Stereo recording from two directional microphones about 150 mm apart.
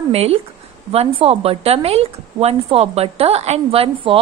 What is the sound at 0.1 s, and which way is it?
A woman's voice, 45° right (ahead or behind).